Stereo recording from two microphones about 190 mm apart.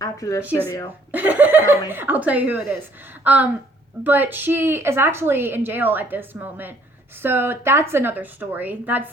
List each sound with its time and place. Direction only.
0.0 s speech: 15° left (ahead or behind)
1.1 s a woman's voice: 10° right (ahead or behind)